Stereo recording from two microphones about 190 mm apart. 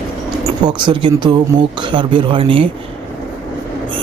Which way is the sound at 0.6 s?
25° right (ahead or behind).